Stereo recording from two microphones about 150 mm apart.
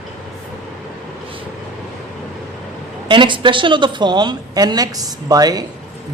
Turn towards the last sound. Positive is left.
turn(degrees=-25)  # may be behind; listen again after turning